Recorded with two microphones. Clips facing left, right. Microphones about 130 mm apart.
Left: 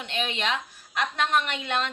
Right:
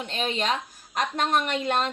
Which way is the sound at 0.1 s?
40° right (ahead or behind).